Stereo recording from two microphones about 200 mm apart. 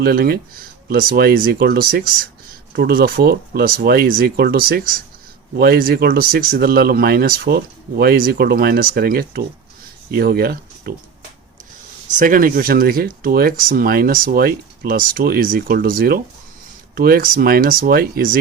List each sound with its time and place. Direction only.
0.0 s speech: 50° right (ahead or behind)
12.2 s speech: 45° right (ahead or behind)